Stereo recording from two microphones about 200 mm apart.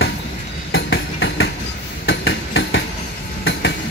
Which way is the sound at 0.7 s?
70° left (ahead or behind).